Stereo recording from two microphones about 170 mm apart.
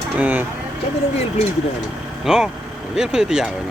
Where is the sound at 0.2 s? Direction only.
10° right (ahead or behind).